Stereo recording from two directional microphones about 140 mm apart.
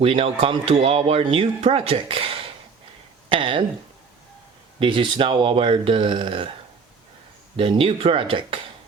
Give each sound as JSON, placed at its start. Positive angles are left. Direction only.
{"t": 0.0, "sound": "speech", "side_deg": -40}
{"t": 4.8, "sound": "speech", "side_deg": -35}
{"t": 7.5, "sound": "speech", "side_deg": -40}